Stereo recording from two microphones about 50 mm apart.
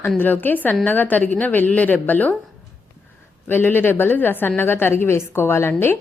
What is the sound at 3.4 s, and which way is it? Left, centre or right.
A woman's voice, left.